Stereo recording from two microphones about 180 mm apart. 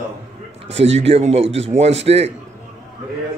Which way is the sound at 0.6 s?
35° right (ahead or behind).